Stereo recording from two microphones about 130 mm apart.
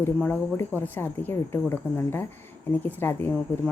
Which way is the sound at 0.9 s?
15° left (ahead or behind).